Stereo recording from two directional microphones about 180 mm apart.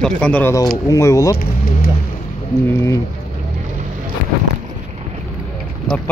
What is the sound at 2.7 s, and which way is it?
Speech, 15° left (ahead or behind).